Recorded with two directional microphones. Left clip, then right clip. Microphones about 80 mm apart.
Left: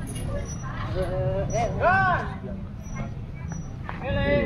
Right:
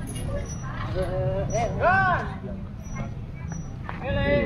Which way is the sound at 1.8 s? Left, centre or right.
Centre.